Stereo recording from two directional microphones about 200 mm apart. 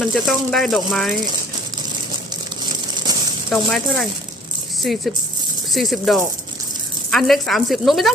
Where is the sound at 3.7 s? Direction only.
Centre (ahead or behind).